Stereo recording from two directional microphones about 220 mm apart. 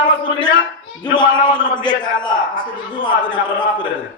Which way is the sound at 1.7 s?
20° left (ahead or behind).